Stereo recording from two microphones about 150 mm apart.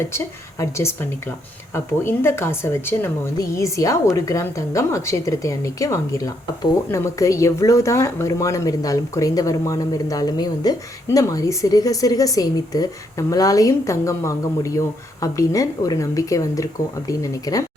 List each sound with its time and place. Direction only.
0.1 s speech: 15° left (ahead or behind)